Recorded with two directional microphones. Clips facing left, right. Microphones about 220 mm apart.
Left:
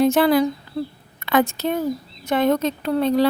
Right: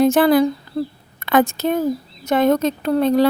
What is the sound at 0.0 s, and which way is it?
Speech, 50° right (ahead or behind).